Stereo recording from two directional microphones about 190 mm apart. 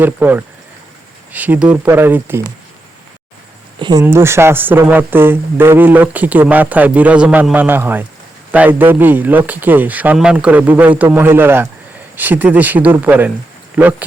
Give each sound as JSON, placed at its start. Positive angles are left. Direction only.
{"t": 0.0, "sound": "speech", "side_deg": -10}
{"t": 3.8, "sound": "speech", "side_deg": -25}